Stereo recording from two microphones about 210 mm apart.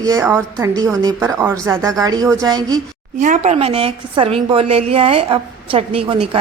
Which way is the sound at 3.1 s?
35° right (ahead or behind).